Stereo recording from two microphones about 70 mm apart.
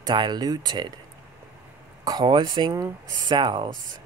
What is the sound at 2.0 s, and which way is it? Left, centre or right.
Speech, right.